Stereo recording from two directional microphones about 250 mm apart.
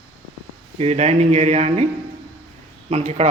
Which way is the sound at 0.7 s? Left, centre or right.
Right.